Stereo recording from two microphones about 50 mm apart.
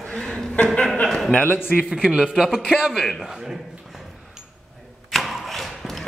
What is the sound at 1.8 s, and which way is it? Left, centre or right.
A man's voice, centre.